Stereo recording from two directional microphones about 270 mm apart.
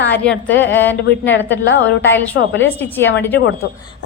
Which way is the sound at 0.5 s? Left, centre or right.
Left.